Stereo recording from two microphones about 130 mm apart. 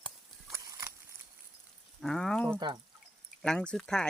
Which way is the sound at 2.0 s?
5° left (ahead or behind).